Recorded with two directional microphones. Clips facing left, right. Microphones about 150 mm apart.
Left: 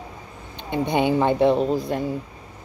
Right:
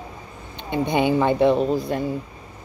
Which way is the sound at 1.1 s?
30° left (ahead or behind).